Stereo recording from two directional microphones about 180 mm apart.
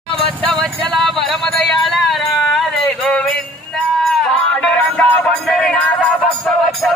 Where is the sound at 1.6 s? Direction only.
Centre (ahead or behind).